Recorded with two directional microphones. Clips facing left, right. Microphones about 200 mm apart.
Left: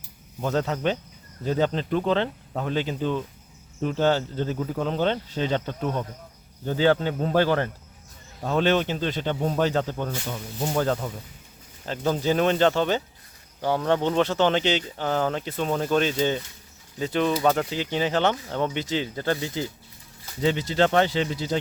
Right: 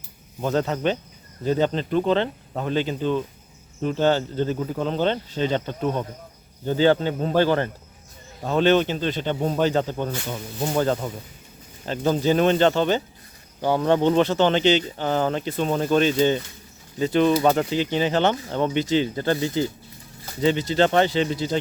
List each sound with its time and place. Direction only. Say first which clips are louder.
0.4 s speech: right 2 dB; 5° right (ahead or behind)
8.4 s speech: right 3 dB; 5° left (ahead or behind)
11.0 s speech: right 2 dB; 20° right (ahead or behind)
11.9 s speech: right 3 dB; centre (ahead or behind)
13.6 s speech: right 3 dB; 5° right (ahead or behind)